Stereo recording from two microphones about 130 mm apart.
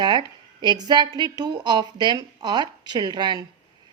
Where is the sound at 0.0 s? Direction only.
35° right (ahead or behind).